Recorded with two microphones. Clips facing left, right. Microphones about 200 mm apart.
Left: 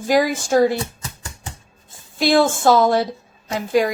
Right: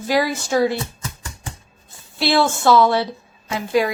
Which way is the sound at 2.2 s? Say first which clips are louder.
Left 2 dB; 45° left (ahead or behind).